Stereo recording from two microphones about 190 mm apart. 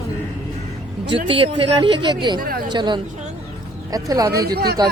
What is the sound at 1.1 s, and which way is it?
A man's voice, 30° right (ahead or behind).